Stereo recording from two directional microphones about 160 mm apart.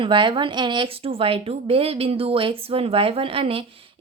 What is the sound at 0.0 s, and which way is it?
A woman's voice, 30° right (ahead or behind).